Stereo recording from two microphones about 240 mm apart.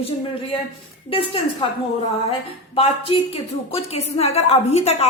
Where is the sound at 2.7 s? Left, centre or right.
Left.